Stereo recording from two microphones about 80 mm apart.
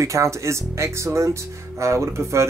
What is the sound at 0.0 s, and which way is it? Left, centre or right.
Speech, right.